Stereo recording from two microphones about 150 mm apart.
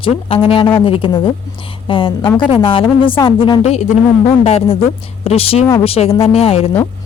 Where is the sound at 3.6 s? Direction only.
50° left (ahead or behind).